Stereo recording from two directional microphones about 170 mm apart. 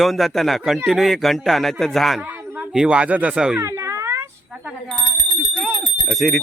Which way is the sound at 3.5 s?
15° right (ahead or behind).